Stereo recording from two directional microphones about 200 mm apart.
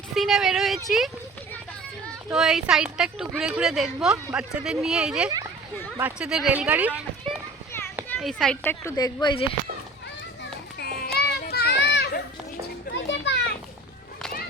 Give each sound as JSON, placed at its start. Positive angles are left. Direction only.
{"t": 0.1, "sound": "a woman's voice", "side_deg": 0}
{"t": 2.3, "sound": "a woman's voice", "side_deg": 0}
{"t": 8.8, "sound": "a woman's voice", "side_deg": 15}
{"t": 10.8, "sound": "children playing", "side_deg": 50}